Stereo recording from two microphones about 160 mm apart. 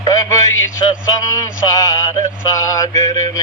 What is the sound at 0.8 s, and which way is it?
Speech, 30° left (ahead or behind).